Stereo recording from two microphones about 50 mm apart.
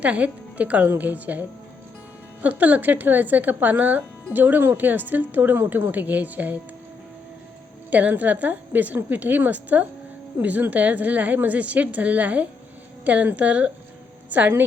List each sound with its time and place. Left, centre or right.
0.0 s speech: right
7.9 s a woman's voice: right